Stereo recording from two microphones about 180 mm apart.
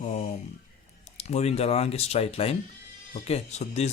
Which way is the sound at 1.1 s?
35° left (ahead or behind).